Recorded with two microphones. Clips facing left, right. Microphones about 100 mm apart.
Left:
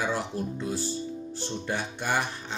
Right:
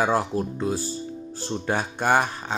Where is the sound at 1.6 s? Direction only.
50° right (ahead or behind).